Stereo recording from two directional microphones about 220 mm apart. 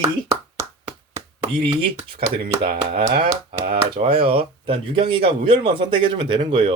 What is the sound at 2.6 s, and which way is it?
Speech, 40° right (ahead or behind).